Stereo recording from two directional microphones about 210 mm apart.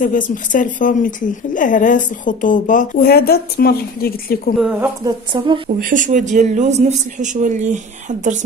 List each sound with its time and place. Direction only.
0.0 s a woman's voice: 40° left (ahead or behind)
4.6 s speech: 5° right (ahead or behind)
5.0 s a woman's voice: 20° right (ahead or behind)
5.8 s a man's voice: 40° right (ahead or behind)